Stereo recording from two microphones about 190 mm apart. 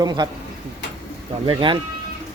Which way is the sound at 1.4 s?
25° right (ahead or behind).